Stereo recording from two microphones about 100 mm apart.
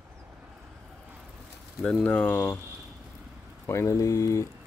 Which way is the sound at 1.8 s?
10° left (ahead or behind).